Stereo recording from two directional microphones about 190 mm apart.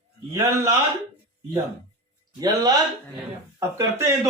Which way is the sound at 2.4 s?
20° right (ahead or behind).